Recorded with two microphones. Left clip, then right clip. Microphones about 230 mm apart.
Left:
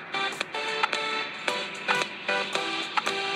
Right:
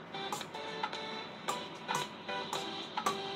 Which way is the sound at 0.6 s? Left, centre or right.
Left.